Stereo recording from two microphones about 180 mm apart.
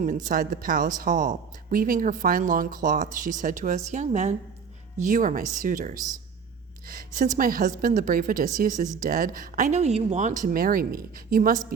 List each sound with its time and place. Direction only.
0.3 s speech: 50° right (ahead or behind)